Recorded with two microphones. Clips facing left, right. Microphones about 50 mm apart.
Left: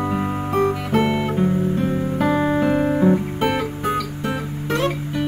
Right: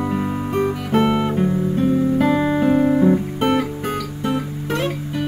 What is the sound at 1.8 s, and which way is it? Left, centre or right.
Music, left.